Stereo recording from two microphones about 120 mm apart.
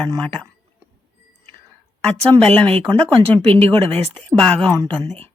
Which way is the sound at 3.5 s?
50° right (ahead or behind).